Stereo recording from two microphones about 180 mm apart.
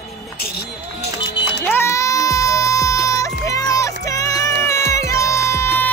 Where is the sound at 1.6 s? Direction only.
10° left (ahead or behind).